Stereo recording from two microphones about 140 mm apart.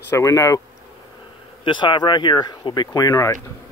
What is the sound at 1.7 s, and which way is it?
Speech, 35° left (ahead or behind).